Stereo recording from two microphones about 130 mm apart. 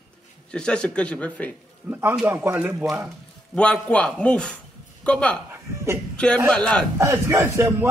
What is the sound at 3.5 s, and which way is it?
A man's voice, 10° left (ahead or behind).